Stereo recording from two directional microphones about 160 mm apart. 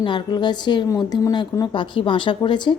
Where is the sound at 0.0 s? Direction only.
30° left (ahead or behind).